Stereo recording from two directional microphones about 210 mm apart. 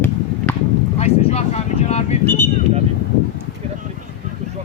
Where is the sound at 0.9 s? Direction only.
30° left (ahead or behind).